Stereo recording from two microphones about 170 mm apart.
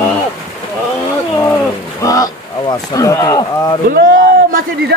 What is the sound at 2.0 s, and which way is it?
Speech, 20° left (ahead or behind).